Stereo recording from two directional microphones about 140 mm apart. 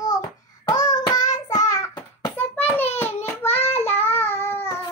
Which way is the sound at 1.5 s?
25° left (ahead or behind).